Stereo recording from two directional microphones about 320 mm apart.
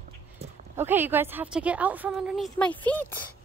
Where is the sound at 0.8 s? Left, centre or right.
Centre.